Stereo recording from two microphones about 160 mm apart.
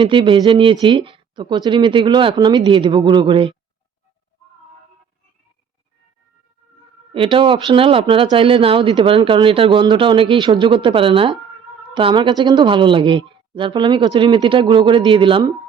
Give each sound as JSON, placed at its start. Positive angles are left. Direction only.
{"t": 0.0, "sound": "speech", "side_deg": -30}
{"t": 7.1, "sound": "speech", "side_deg": -35}